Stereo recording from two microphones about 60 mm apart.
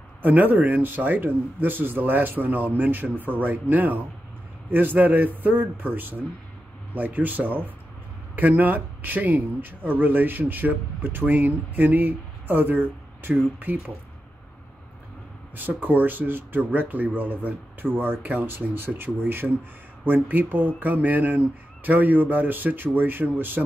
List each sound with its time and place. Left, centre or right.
0.2 s speech: right
15.5 s speech: right